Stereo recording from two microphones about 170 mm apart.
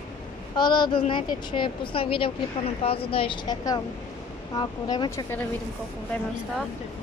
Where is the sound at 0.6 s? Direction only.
25° left (ahead or behind).